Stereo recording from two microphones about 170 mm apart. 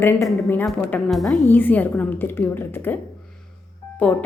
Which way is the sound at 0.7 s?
Centre (ahead or behind).